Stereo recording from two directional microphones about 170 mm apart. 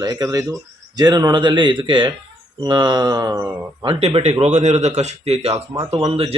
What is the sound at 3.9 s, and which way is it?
A man's voice, 35° right (ahead or behind).